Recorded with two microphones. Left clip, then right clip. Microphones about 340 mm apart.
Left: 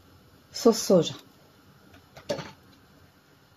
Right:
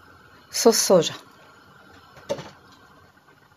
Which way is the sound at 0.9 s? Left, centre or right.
Right.